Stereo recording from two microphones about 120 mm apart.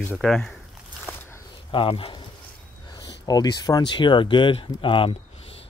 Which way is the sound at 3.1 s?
35° left (ahead or behind).